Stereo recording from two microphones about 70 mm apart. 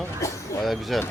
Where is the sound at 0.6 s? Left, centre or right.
Centre.